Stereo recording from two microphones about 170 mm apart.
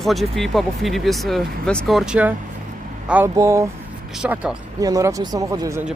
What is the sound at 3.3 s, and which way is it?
Speech, 15° right (ahead or behind).